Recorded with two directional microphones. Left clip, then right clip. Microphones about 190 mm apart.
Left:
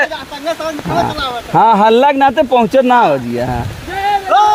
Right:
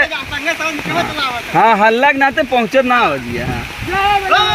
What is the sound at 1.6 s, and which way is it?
Speech, 60° left (ahead or behind).